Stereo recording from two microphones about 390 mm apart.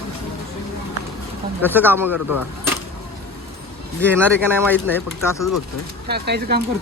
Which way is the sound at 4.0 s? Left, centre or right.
Centre.